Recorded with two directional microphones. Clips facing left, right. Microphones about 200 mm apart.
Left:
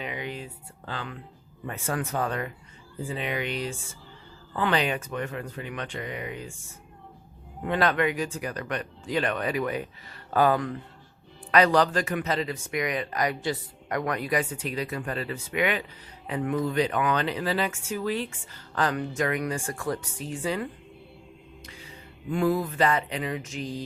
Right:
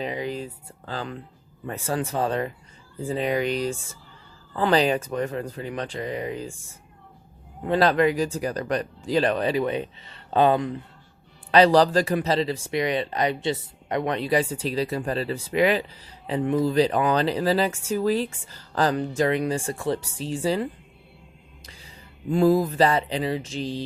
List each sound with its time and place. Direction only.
0.0 s speech: 35° right (ahead or behind)
7.7 s speech: 35° right (ahead or behind)
21.7 s speech: 35° right (ahead or behind)